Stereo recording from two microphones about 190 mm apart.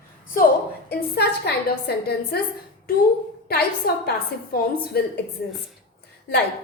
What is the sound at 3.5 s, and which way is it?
A woman's voice, 55° left (ahead or behind).